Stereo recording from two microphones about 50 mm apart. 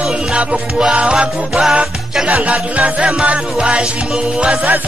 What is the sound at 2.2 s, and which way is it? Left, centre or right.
Music, right.